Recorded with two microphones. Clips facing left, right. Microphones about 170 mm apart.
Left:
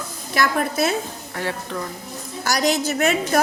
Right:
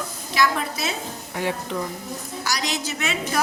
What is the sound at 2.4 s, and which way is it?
Speech, 50° left (ahead or behind).